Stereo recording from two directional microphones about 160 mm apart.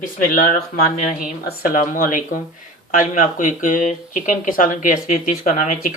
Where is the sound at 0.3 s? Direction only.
55° left (ahead or behind).